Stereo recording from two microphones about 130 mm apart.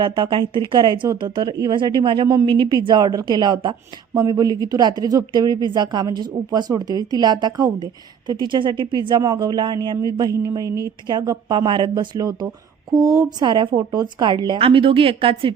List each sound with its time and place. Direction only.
0.0 s speech: 35° right (ahead or behind)
12.9 s speech: centre (ahead or behind)
13.1 s a woman's voice: 35° right (ahead or behind)